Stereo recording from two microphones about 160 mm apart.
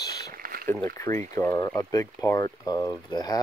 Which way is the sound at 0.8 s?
20° left (ahead or behind).